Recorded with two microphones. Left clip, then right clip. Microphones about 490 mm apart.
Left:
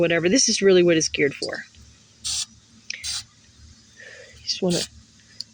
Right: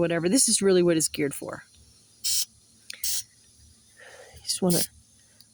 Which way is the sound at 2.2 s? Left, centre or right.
Right.